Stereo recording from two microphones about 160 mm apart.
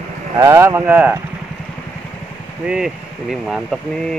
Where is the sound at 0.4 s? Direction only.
15° right (ahead or behind).